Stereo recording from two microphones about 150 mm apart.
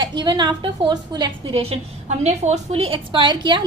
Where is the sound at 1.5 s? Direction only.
40° right (ahead or behind).